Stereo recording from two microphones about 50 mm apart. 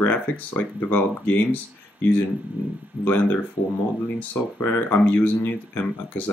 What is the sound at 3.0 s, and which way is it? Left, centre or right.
Speech, left.